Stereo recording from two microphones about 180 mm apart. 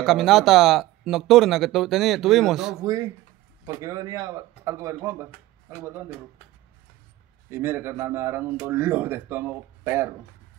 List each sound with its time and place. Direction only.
0.0 s speech: centre (ahead or behind)
2.8 s speech: 20° right (ahead or behind)
7.5 s speech: 10° right (ahead or behind)